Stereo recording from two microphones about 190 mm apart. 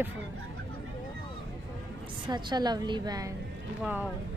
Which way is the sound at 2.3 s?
20° right (ahead or behind).